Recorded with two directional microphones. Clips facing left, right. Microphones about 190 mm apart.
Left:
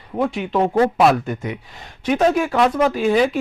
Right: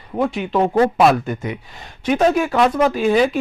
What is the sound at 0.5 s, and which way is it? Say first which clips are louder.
Speech: right 1 dB; 35° right (ahead or behind).